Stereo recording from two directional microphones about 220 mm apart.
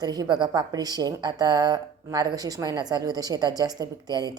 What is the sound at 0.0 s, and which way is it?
A woman's voice, 20° right (ahead or behind).